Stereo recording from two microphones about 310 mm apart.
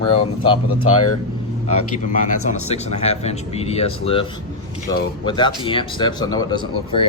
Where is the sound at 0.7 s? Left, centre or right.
Left.